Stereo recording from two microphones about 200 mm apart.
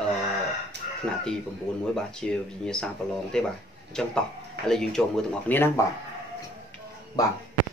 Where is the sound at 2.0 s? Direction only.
5° left (ahead or behind).